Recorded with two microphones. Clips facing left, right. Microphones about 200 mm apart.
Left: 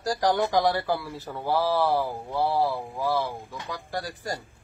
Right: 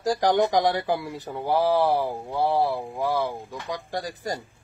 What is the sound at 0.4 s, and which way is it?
Speech, 15° right (ahead or behind).